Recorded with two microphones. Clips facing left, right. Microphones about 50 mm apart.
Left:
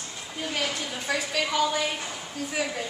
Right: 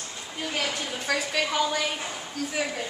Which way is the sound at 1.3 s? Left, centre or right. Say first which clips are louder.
Left 2 dB; centre.